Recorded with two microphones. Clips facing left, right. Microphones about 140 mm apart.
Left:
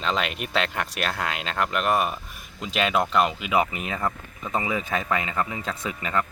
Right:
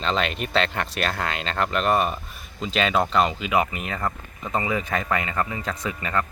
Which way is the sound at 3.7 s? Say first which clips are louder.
Even; 15° left (ahead or behind).